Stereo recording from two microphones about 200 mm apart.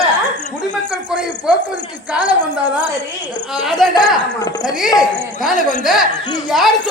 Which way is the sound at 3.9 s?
20° left (ahead or behind).